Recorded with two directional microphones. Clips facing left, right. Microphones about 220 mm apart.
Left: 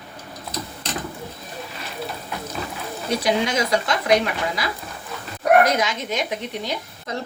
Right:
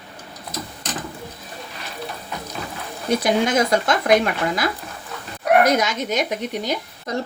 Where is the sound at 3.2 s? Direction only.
50° right (ahead or behind).